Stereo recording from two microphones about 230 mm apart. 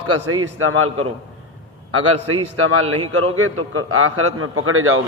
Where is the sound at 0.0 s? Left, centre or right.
Right.